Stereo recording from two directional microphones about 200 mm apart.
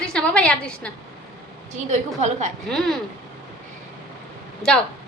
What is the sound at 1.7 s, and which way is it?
Speech, 35° right (ahead or behind).